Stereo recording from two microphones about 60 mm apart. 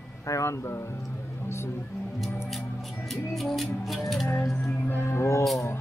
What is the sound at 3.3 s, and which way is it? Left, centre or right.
Music, centre.